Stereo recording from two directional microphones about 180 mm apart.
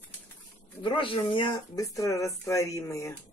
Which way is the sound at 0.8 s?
30° left (ahead or behind).